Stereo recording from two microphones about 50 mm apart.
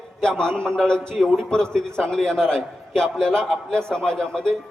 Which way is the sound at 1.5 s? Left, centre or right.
Centre.